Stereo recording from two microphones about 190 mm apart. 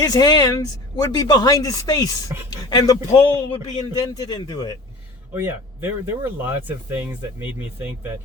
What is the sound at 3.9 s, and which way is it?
Speech, 20° left (ahead or behind).